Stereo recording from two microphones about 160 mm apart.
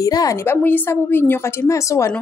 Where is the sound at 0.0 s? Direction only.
20° left (ahead or behind).